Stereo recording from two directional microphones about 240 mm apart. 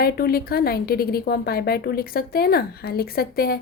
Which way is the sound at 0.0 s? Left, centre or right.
Left.